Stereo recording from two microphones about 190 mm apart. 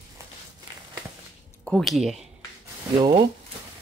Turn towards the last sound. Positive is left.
turn(degrees=-20)  # may be behind; listen again after turning